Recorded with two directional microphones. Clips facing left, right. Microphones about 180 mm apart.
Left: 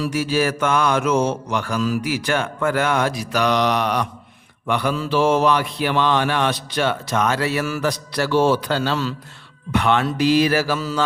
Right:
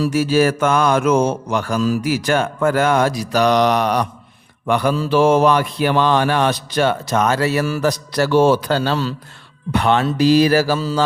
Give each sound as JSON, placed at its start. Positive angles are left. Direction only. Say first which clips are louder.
{"t": 0.0, "sound": "mantra", "louder": "right 5 dB", "side_deg": -45}